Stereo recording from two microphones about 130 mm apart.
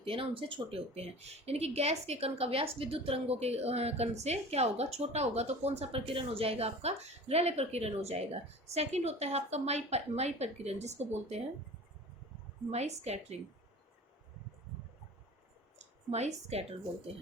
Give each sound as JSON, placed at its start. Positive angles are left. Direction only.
{"t": 0.0, "sound": "speech", "side_deg": -45}
{"t": 12.7, "sound": "speech", "side_deg": -55}
{"t": 16.0, "sound": "speech", "side_deg": -55}